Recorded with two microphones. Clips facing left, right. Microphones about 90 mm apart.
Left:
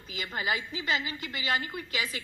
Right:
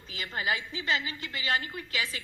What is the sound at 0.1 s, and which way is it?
A woman's voice, 25° left (ahead or behind).